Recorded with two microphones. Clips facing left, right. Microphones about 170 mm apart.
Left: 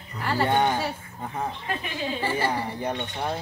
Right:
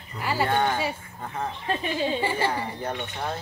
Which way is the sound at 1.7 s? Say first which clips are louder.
Right 7 dB; 30° right (ahead or behind).